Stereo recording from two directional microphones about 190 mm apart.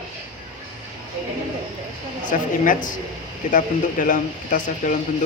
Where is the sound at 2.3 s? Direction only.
45° left (ahead or behind).